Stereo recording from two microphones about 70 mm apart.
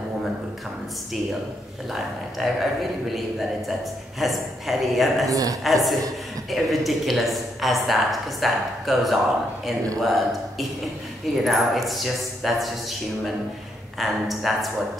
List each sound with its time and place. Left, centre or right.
1.9 s speech: centre
5.3 s a woman's voice: right
5.6 s speech: centre
13.9 s speech: centre